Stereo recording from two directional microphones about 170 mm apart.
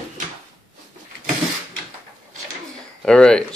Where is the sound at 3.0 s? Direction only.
5° left (ahead or behind).